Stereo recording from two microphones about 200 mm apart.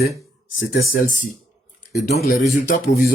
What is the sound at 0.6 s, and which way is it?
Speech, 45° left (ahead or behind).